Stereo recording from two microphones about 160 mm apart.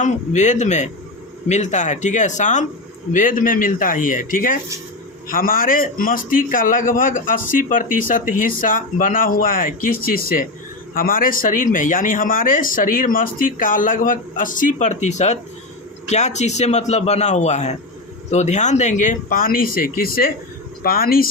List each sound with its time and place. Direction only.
0.0 s a man's voice: 50° left (ahead or behind); by 21.2 s 65° left (ahead or behind)